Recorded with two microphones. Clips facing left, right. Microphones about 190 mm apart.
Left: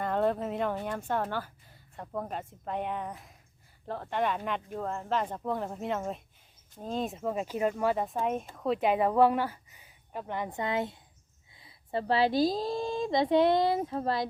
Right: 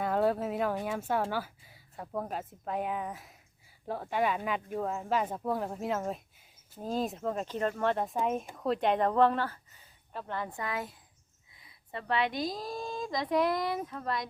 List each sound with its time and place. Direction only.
0.0 s speech: 5° right (ahead or behind); by 14.3 s 30° left (ahead or behind)